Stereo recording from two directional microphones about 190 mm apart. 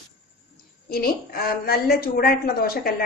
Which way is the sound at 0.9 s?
55° left (ahead or behind).